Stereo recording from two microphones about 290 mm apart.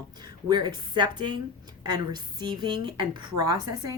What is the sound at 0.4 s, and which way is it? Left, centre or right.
Speech, centre.